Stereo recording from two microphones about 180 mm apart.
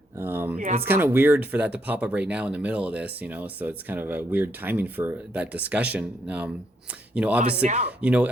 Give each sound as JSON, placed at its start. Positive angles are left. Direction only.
{"t": 0.2, "sound": "speech", "side_deg": -10}
{"t": 0.6, "sound": "speech", "side_deg": -45}
{"t": 0.9, "sound": "speech", "side_deg": -10}
{"t": 7.6, "sound": "speech", "side_deg": -40}
{"t": 7.9, "sound": "speech", "side_deg": -5}